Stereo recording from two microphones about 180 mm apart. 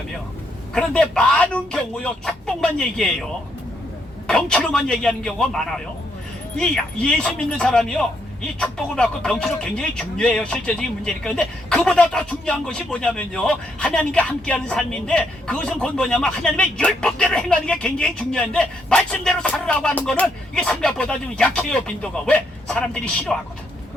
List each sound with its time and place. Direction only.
0.7 s speech: 5° left (ahead or behind)
4.3 s speech: 5° left (ahead or behind)